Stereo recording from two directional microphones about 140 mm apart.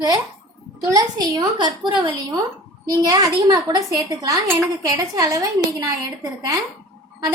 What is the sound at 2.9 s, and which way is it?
A woman's voice, 25° right (ahead or behind).